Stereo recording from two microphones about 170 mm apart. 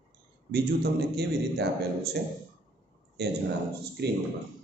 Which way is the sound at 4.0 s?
80° right.